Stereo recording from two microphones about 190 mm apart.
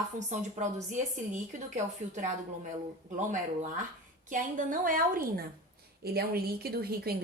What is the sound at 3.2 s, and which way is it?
A woman's voice, 40° right (ahead or behind).